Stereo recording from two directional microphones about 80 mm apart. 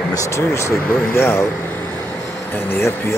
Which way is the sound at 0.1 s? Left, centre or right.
Left.